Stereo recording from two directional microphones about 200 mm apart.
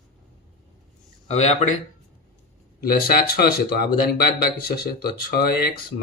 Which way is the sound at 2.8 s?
50° left (ahead or behind).